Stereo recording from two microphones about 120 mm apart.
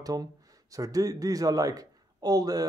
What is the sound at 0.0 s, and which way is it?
Speech, 30° right (ahead or behind).